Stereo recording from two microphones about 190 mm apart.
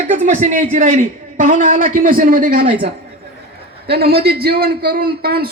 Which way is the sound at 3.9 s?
55° right (ahead or behind).